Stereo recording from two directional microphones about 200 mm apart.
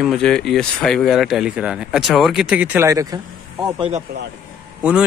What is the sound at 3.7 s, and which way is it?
Speech, 30° right (ahead or behind).